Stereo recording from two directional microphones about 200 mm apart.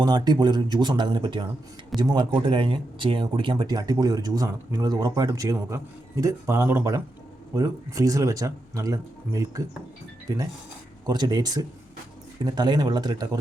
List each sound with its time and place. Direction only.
0.0 s speech: 20° right (ahead or behind)